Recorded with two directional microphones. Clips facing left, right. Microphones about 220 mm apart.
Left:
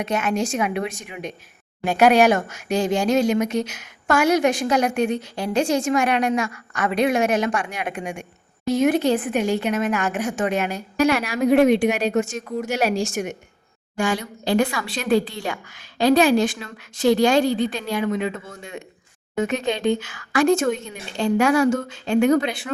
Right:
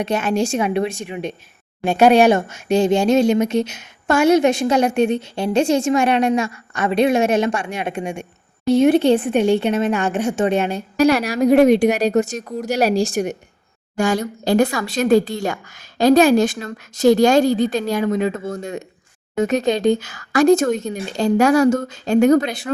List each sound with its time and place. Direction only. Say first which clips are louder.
0.0 s speech: right 4 dB; 30° right (ahead or behind)